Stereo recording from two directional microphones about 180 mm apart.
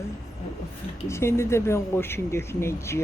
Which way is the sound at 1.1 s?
15° left (ahead or behind).